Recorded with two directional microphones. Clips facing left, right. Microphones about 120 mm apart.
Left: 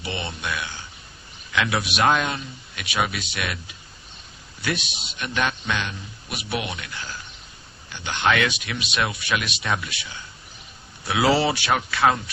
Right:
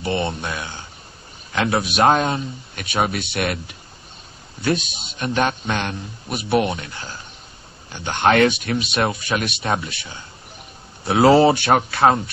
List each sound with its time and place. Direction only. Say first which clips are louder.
0.0 s speech: right 8 dB; 50° right (ahead or behind)
6.7 s speech: right 5 dB; 30° right (ahead or behind)
9.6 s speech: right 4 dB; 30° right (ahead or behind); by 12.0 s 50° right (ahead or behind)